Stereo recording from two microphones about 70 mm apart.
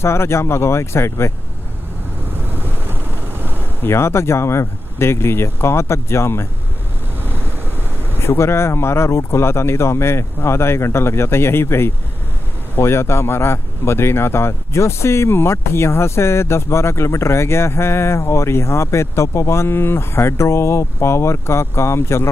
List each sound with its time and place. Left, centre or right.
0.0 s speech: left
2.4 s wind noise: right
3.8 s speech: left
7.2 s vehicle: right
8.2 s speech: left